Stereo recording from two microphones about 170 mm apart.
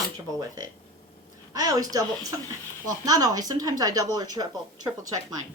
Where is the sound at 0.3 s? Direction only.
20° right (ahead or behind).